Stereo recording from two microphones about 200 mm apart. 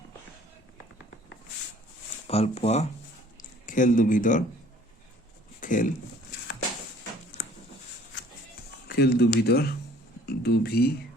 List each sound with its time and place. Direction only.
2.2 s speech: 30° left (ahead or behind)
5.5 s a sound: 40° left (ahead or behind)
8.9 s speech: 50° left (ahead or behind)